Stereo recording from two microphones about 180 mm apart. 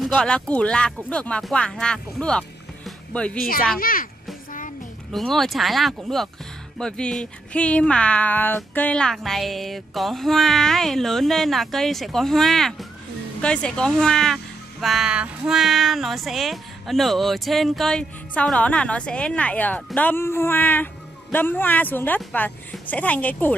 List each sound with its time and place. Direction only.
0.0 s speech: 5° left (ahead or behind)
3.7 s a child's voice: 50° left (ahead or behind)
4.5 s music: 50° left (ahead or behind)
5.1 s speech: centre (ahead or behind)